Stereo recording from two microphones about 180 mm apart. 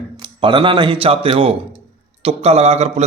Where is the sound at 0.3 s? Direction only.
30° right (ahead or behind).